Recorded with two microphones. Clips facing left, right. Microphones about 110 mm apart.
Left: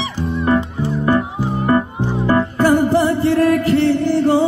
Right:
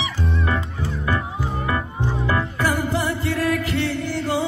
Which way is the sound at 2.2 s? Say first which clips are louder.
Left 9 dB; 35° left (ahead or behind).